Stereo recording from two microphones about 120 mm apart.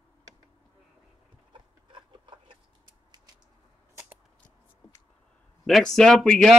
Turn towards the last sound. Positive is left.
turn(degrees=5)  # may be behind; listen again after turning